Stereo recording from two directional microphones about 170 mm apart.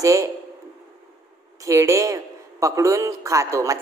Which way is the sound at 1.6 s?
15° right (ahead or behind).